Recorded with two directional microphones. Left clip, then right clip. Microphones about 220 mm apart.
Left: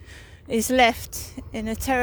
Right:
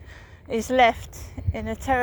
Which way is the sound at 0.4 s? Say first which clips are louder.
Even; 50° left (ahead or behind).